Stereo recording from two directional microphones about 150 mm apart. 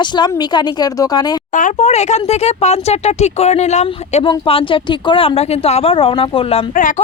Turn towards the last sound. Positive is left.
turn(degrees=60)  # may be behind; listen again after turning